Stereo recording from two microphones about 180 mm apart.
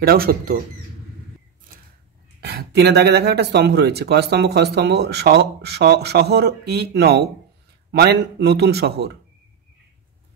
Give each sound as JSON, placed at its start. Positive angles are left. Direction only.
{"t": 0.0, "sound": "speech", "side_deg": -55}
{"t": 2.4, "sound": "speech", "side_deg": -65}